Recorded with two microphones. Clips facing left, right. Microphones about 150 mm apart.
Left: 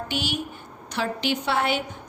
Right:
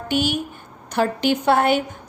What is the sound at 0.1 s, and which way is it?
A woman's voice, 50° right (ahead or behind).